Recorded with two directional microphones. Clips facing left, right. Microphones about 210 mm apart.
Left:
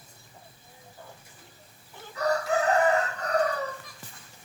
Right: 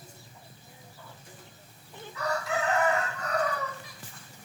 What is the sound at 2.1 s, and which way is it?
Chicken, 40° left (ahead or behind).